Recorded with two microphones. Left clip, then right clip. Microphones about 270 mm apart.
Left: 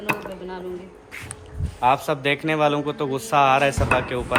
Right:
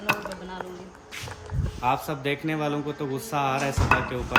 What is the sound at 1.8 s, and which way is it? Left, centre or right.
A man's voice, centre.